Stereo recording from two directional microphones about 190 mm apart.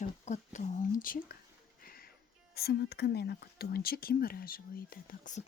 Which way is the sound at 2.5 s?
55° left (ahead or behind).